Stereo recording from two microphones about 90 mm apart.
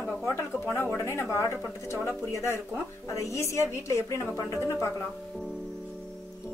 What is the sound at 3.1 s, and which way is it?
Music, 35° left (ahead or behind).